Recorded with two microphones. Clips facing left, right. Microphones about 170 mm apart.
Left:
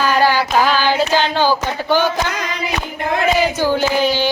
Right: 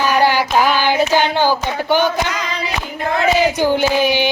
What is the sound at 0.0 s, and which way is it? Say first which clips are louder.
Child singing: even; 15° right (ahead or behind).